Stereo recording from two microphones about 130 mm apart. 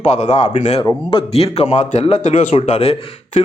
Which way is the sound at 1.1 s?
45° left (ahead or behind).